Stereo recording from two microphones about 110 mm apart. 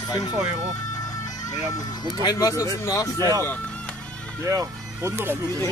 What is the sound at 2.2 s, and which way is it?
Speech, 35° left (ahead or behind).